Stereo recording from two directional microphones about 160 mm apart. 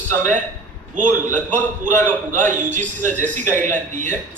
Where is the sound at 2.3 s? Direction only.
50° right (ahead or behind).